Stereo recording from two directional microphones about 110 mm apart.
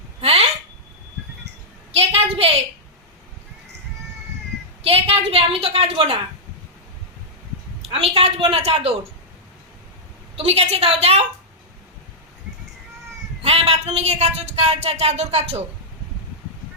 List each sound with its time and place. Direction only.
0.2 s a sound: 65° right (ahead or behind)
2.0 s a sound: 65° right (ahead or behind)
4.8 s a woman's voice: 65° right (ahead or behind)
7.8 s a woman's voice: 65° right (ahead or behind)
10.3 s a woman's voice: 70° right (ahead or behind)
13.4 s speech: 70° right (ahead or behind)